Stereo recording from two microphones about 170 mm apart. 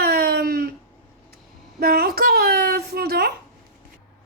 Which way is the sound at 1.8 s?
65° right (ahead or behind).